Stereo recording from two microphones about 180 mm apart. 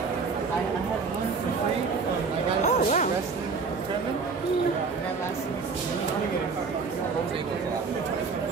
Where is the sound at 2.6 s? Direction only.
40° left (ahead or behind).